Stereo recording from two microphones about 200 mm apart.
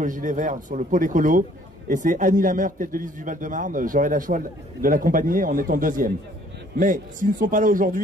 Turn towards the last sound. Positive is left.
turn(degrees=-40)  # may be behind; listen again after turning